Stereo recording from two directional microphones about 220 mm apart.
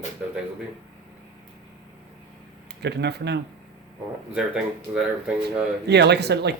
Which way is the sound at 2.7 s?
50° right (ahead or behind).